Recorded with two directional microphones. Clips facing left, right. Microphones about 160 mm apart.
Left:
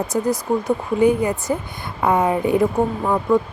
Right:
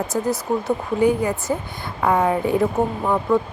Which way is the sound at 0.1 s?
15° left (ahead or behind).